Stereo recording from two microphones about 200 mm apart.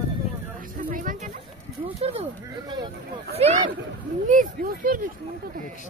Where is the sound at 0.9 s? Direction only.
40° right (ahead or behind).